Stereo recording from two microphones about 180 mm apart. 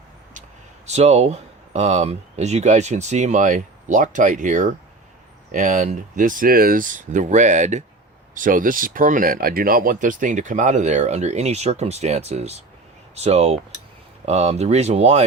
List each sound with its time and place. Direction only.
0.9 s speech: 40° right (ahead or behind)